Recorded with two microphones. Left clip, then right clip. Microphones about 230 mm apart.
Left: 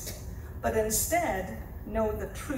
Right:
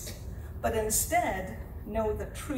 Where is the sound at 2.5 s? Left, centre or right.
Right.